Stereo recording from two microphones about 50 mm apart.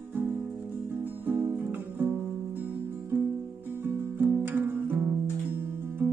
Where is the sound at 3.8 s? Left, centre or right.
Right.